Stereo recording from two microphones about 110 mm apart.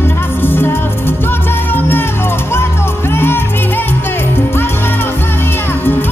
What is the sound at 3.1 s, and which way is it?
Music, 20° left (ahead or behind).